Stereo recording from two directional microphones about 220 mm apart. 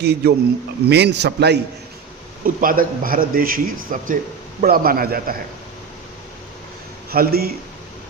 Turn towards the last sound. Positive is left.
turn(degrees=-45)  # may be behind; listen again after turning